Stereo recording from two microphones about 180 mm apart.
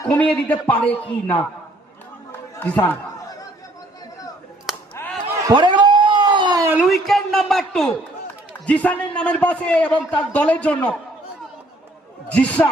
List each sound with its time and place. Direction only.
0.0 s a man's voice: 10° left (ahead or behind)
2.3 s chatter: 10° left (ahead or behind)
4.9 s a sound: 10° left (ahead or behind)
5.5 s a sound: 25° right (ahead or behind)
6.7 s a man's voice: centre (ahead or behind)
12.3 s a man's voice: 10° left (ahead or behind)